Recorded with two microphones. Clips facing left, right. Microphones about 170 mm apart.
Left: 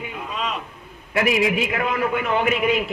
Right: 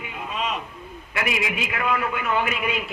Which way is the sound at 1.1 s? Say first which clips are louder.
Left 7 dB; 35° left (ahead or behind).